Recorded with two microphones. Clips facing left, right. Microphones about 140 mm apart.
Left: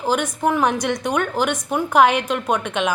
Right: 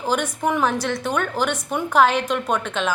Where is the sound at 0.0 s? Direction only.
10° left (ahead or behind).